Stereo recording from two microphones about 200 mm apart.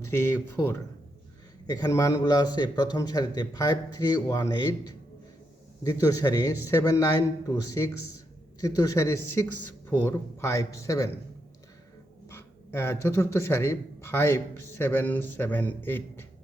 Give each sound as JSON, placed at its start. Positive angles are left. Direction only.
{"t": 0.0, "sound": "a man's voice", "side_deg": 15}
{"t": 12.3, "sound": "speech", "side_deg": 15}